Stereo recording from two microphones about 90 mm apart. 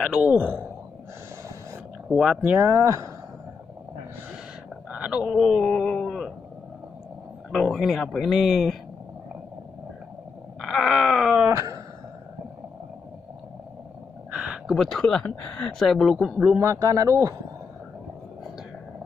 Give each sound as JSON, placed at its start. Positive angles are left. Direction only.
{"t": 0.0, "sound": "a man's voice", "side_deg": -10}
{"t": 2.0, "sound": "speech", "side_deg": -5}
{"t": 2.4, "sound": "speech", "side_deg": -25}
{"t": 4.9, "sound": "a sound", "side_deg": -10}
{"t": 7.5, "sound": "speech", "side_deg": 0}
{"t": 10.6, "sound": "wail", "side_deg": 0}
{"t": 11.4, "sound": "wail", "side_deg": -35}
{"t": 14.3, "sound": "a sound", "side_deg": -10}
{"t": 14.7, "sound": "speech", "side_deg": 5}
{"t": 16.6, "sound": "speech", "side_deg": -35}